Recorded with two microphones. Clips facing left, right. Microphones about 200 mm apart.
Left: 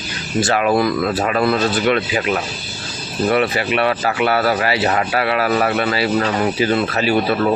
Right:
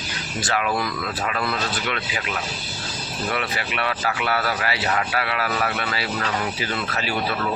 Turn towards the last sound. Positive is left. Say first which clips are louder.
# left 10 dB
turn(degrees=30)  # may be behind; listen again after turning